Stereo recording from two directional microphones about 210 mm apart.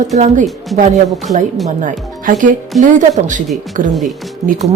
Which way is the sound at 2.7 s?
Centre (ahead or behind).